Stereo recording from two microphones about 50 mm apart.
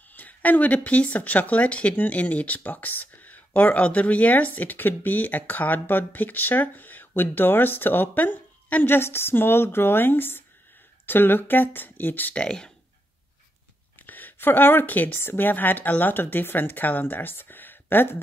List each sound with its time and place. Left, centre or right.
0.1 s speech: left
8.8 s a woman's voice: left
12.4 s speech: centre
13.9 s a sound: left
15.3 s speech: left